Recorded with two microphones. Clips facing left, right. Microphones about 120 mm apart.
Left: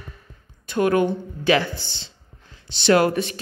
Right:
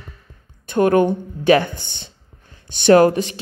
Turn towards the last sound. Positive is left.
turn(degrees=-30)  # may be behind; listen again after turning